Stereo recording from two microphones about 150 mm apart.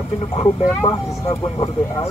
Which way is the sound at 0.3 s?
40° left (ahead or behind).